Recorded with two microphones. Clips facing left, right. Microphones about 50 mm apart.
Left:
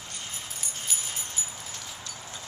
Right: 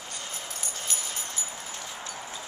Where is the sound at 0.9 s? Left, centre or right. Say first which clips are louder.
Even; centre.